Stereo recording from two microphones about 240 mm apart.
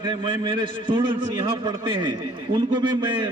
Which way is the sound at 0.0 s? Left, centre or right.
Centre.